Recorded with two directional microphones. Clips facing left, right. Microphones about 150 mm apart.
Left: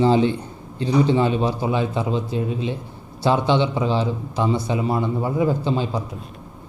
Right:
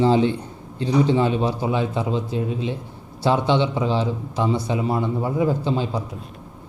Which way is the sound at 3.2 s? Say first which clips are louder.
Left 1 dB; 10° left (ahead or behind).